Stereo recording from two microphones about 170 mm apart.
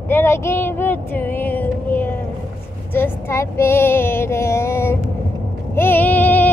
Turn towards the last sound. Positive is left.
turn(degrees=10)  # may be behind; listen again after turning